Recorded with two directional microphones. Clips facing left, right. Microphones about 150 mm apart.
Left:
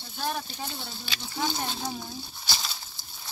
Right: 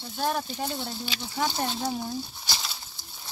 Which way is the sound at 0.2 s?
60° right (ahead or behind).